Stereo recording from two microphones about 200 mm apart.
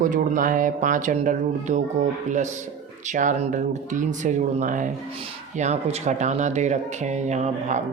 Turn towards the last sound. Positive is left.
turn(degrees=-35)  # may be behind; listen again after turning